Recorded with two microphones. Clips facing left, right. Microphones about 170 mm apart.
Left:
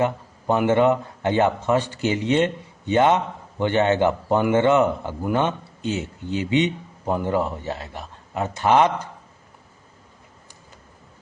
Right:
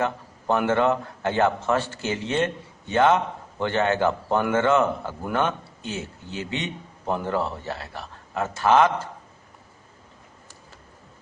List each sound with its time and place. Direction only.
0.0 s a man's voice: 15° left (ahead or behind)